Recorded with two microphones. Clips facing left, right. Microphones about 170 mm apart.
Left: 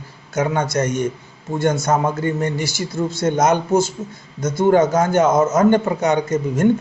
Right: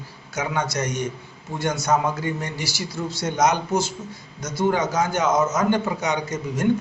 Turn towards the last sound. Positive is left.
turn(degrees=50)  # may be behind; listen again after turning